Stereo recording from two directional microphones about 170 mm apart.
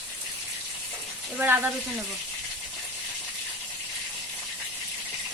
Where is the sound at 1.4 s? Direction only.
10° right (ahead or behind).